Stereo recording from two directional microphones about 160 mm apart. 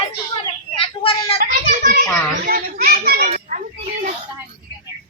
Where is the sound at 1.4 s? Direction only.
50° right (ahead or behind).